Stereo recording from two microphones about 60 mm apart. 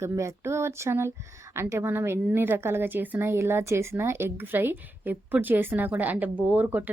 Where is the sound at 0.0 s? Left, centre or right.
Right.